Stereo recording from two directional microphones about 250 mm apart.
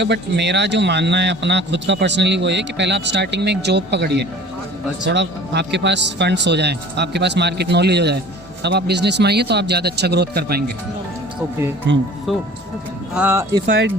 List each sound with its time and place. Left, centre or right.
0.0 s a man's voice: right
11.9 s a man's voice: right
12.3 s speech: centre